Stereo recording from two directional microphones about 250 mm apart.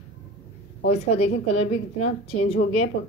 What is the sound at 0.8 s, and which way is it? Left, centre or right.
A woman's voice, left.